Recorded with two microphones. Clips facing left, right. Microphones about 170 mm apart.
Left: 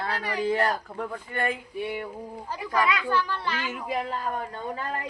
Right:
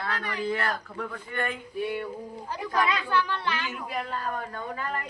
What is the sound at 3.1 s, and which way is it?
A woman's voice, 10° left (ahead or behind).